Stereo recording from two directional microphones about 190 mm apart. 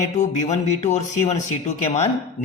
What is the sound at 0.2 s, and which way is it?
A man's voice, 40° left (ahead or behind).